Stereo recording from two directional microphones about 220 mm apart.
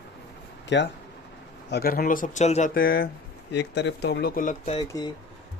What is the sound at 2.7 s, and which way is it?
Speech, 45° left (ahead or behind).